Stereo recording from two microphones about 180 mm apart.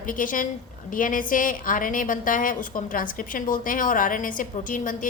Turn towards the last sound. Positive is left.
turn(degrees=50)  # may be behind; listen again after turning